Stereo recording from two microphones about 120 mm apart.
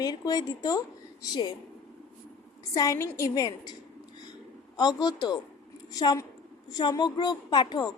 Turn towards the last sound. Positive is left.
turn(degrees=40)  # may be behind; listen again after turning